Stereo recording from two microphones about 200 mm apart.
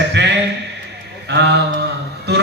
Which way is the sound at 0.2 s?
60° right (ahead or behind).